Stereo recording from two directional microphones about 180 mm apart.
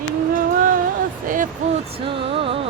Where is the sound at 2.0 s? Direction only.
30° right (ahead or behind).